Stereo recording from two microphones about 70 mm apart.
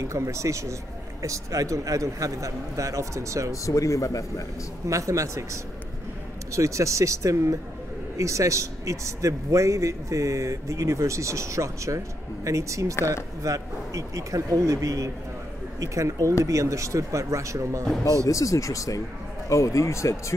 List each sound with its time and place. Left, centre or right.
0.0 s a man's voice: right
3.6 s a man's voice: left
4.8 s a man's voice: right
18.2 s a man's voice: left